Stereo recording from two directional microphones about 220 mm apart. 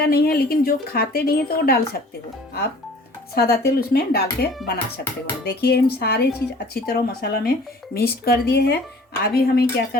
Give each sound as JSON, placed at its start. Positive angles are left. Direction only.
{"t": 0.0, "sound": "speech", "side_deg": 45}
{"t": 3.3, "sound": "speech", "side_deg": 45}